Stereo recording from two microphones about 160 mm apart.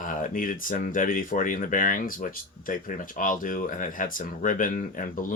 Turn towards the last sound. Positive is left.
turn(degrees=55)  # may be behind; listen again after turning